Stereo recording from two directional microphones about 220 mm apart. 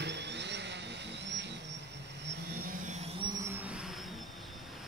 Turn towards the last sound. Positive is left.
turn(degrees=-5)  # may be behind; listen again after turning